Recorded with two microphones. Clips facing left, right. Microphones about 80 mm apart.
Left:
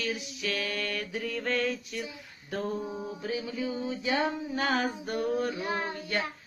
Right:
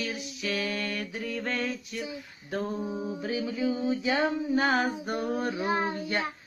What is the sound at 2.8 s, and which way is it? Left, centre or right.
Music, centre.